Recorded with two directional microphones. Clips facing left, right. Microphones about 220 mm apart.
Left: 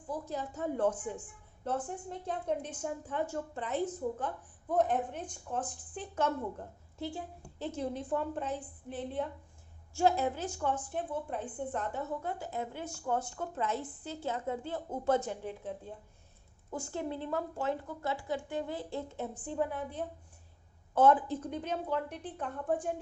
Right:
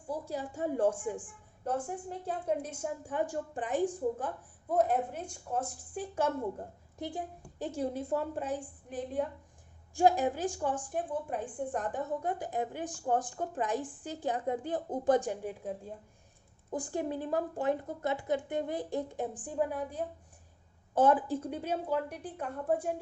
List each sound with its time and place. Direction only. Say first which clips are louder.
0.1 s a woman's voice: right 1 dB; 10° right (ahead or behind)
4.8 s a woman's voice: right 1 dB; 10° right (ahead or behind)
16.7 s a woman's voice: right 3 dB; 15° right (ahead or behind)